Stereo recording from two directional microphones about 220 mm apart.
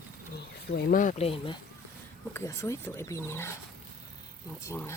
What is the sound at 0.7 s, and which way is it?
Speech, 40° left (ahead or behind).